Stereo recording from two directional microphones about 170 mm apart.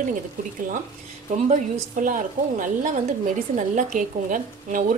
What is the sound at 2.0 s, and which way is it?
A woman's voice, 50° right (ahead or behind).